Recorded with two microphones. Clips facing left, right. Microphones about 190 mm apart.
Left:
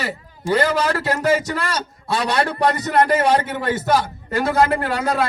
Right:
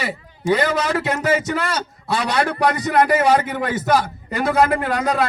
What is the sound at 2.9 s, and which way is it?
Speech, 10° right (ahead or behind).